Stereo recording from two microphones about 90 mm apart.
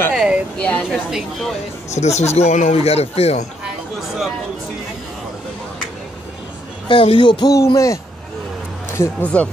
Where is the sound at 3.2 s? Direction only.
90° left.